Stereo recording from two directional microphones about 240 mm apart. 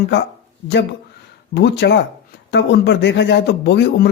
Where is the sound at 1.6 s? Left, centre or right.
Left.